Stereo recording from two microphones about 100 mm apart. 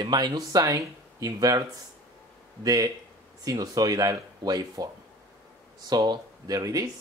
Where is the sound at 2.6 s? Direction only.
35° right (ahead or behind).